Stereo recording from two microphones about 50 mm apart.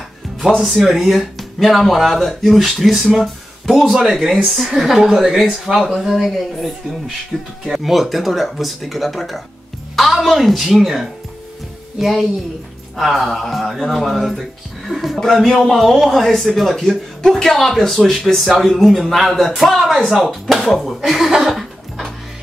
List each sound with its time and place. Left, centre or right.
0.6 s speech: centre